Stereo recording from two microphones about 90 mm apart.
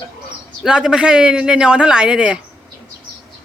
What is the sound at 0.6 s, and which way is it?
Speech, 5° right (ahead or behind).